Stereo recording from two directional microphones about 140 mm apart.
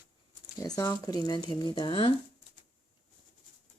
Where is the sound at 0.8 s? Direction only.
25° left (ahead or behind); by 2.1 s 40° left (ahead or behind).